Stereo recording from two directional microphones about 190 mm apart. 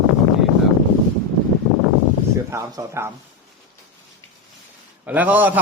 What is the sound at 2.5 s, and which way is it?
Mantra, 15° right (ahead or behind).